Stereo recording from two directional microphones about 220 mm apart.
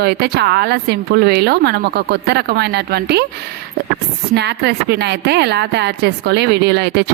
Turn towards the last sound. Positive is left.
turn(degrees=-50)  # may be behind; listen again after turning